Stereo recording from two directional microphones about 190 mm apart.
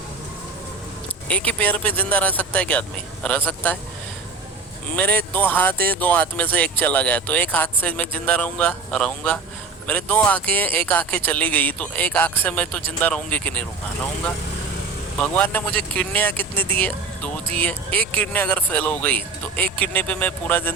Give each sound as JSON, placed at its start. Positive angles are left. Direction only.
{"t": 1.3, "sound": "speech", "side_deg": 5}
{"t": 4.9, "sound": "speech", "side_deg": 10}
{"t": 15.2, "sound": "speech", "side_deg": 10}